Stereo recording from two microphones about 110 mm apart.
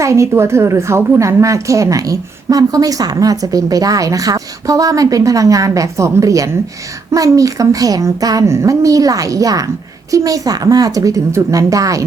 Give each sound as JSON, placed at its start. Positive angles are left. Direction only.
{"t": 0.0, "sound": "a woman's voice", "side_deg": -25}